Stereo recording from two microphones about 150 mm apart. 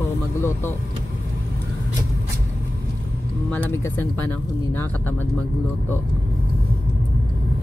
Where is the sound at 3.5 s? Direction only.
10° left (ahead or behind).